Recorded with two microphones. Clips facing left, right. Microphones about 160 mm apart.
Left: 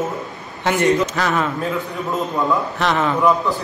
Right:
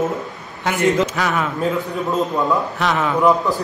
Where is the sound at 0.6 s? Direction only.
5° right (ahead or behind).